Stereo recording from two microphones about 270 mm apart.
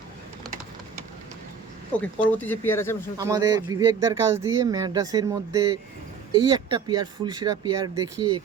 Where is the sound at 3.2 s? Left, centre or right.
Centre.